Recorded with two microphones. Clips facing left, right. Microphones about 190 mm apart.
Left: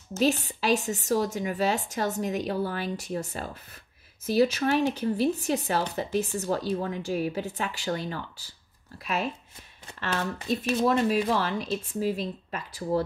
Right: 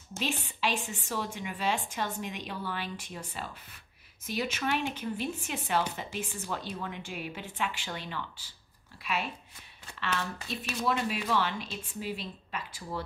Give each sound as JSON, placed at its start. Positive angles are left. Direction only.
{"t": 0.2, "sound": "speech", "side_deg": 40}